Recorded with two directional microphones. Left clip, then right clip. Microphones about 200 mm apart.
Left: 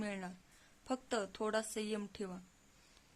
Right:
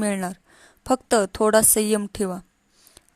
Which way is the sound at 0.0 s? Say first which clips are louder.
Right 18 dB; 50° right (ahead or behind).